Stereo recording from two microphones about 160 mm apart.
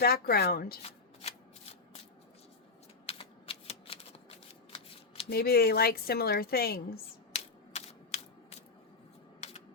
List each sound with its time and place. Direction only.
0.0 s a woman's voice: 75° left (ahead or behind)
0.8 s shuffling cards: 40° left (ahead or behind)
3.1 s typewriter: 35° left (ahead or behind)
4.7 s shuffling cards: 35° left (ahead or behind)
5.3 s a woman's voice: 75° left (ahead or behind)
7.3 s typewriter: 40° left (ahead or behind)
9.4 s a sound: 45° left (ahead or behind)